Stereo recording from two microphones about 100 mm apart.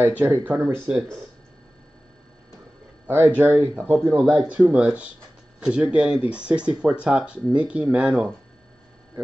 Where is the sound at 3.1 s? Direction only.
20° right (ahead or behind).